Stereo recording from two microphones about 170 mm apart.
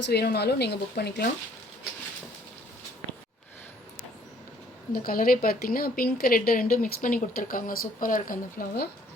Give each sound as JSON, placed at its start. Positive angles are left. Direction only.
{"t": 0.0, "sound": "speech", "side_deg": 70}
{"t": 4.9, "sound": "a woman's voice", "side_deg": 60}